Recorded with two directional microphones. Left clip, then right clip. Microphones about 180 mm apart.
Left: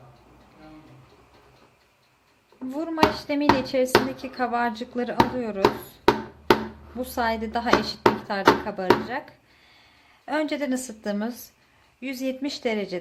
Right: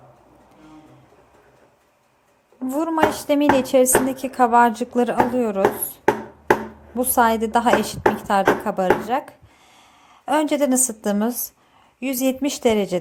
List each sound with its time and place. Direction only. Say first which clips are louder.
2.6 s speech: right 4 dB; 25° right (ahead or behind)
7.0 s speech: right 8 dB; 25° right (ahead or behind)